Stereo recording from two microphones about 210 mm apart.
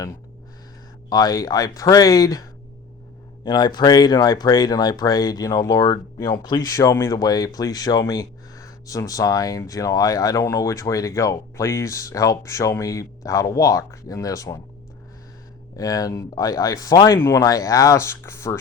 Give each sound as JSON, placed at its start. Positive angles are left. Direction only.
{"t": 1.1, "sound": "speech", "side_deg": 20}
{"t": 15.7, "sound": "speech", "side_deg": 15}